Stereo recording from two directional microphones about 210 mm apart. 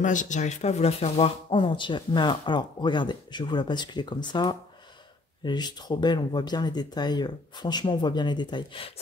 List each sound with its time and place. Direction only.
0.0 s speech: 35° left (ahead or behind)